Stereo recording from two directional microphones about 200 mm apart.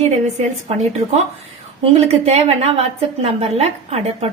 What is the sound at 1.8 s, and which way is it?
A woman's voice, 30° right (ahead or behind).